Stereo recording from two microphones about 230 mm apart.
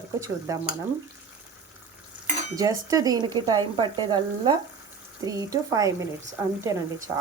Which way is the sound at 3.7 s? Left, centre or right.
Centre.